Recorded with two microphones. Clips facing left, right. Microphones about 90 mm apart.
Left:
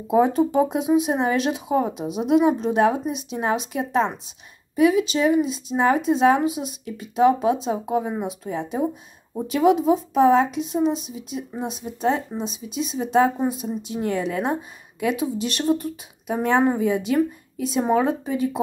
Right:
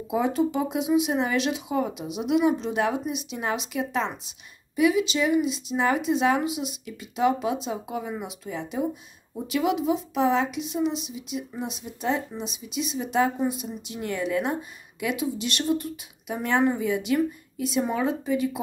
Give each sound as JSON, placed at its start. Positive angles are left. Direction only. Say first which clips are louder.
{"t": 0.1, "sound": "a woman's voice", "louder": "left 6 dB", "side_deg": 35}